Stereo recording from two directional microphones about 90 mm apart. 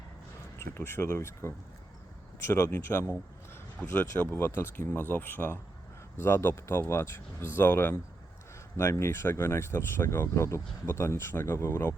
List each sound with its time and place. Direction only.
0.7 s speech: 30° left (ahead or behind)